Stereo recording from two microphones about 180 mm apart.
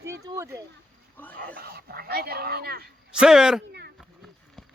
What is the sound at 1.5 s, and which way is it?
Speech, 60° right (ahead or behind).